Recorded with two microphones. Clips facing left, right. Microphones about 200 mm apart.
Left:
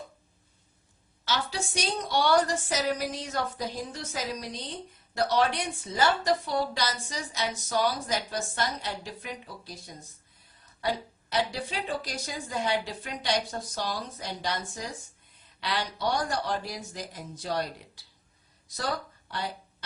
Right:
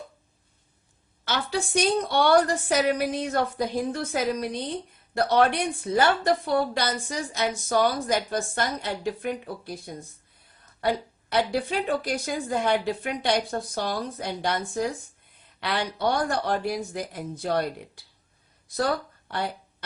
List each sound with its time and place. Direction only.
1.2 s a woman's voice: 55° right (ahead or behind)